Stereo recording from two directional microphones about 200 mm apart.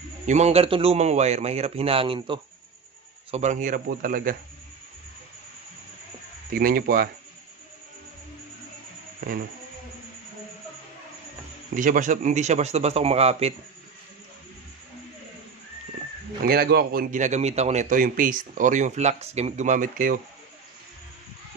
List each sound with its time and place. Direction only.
0.3 s a man's voice: 30° right (ahead or behind)
3.3 s a man's voice: 35° right (ahead or behind)
6.5 s a man's voice: 45° right (ahead or behind)
11.7 s a man's voice: 40° right (ahead or behind)
16.4 s a man's voice: 50° right (ahead or behind)